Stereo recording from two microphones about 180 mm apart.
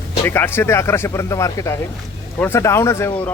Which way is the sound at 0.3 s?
10° left (ahead or behind).